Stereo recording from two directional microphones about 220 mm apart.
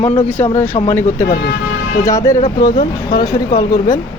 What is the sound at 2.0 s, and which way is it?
A woman's voice, 15° left (ahead or behind).